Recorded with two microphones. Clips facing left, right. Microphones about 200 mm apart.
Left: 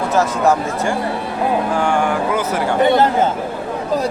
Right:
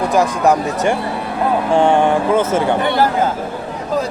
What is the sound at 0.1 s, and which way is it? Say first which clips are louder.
Speech: even; 15° right (ahead or behind).